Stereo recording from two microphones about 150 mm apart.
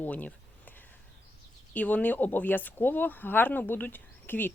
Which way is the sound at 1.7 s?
10° left (ahead or behind).